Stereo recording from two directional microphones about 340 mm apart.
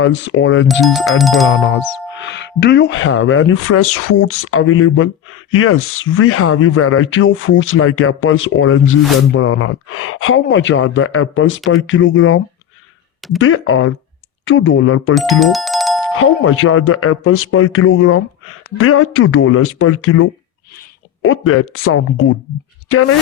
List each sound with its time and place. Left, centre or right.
0.0 s speech: left
0.7 s speech: centre
1.5 s speech: left
13.4 s speech: left
15.1 s speech: centre
16.1 s speech: left
21.2 s speech: left